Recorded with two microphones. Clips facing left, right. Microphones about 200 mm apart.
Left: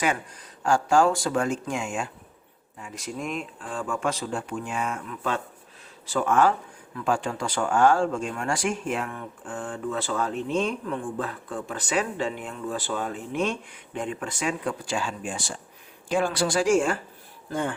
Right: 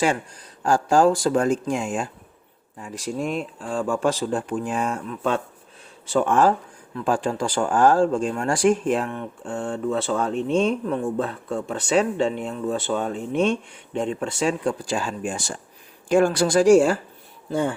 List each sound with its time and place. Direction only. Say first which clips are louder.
0.6 s speech: right 3 dB; 35° right (ahead or behind)
6.1 s a woman's voice: right 3 dB; 30° right (ahead or behind)